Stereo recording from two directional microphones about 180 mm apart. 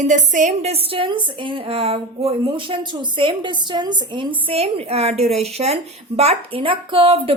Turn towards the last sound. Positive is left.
turn(degrees=-30)  # may be behind; listen again after turning